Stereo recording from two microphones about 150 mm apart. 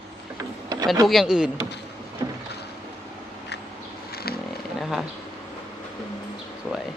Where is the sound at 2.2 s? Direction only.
25° right (ahead or behind).